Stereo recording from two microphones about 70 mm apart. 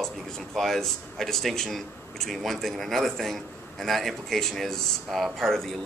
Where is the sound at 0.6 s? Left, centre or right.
Centre.